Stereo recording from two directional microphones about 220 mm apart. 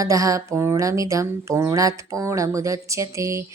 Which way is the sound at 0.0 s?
15° right (ahead or behind).